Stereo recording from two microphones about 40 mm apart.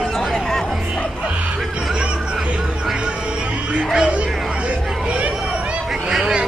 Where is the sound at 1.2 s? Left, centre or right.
Right.